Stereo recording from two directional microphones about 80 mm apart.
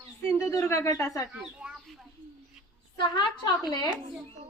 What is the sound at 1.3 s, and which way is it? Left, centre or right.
Speech, centre.